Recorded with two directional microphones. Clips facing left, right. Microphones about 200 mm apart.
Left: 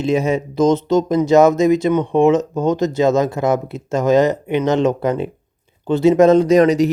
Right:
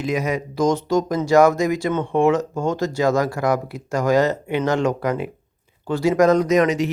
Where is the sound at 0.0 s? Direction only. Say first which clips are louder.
Left 5 dB; 25° left (ahead or behind).